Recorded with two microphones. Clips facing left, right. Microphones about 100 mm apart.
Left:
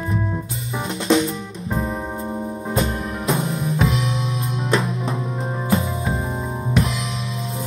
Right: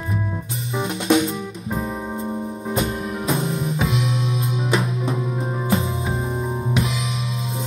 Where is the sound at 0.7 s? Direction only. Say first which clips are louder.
Even; 20° right (ahead or behind).